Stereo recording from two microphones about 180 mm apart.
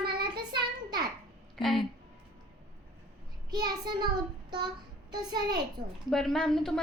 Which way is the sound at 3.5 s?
25° right (ahead or behind).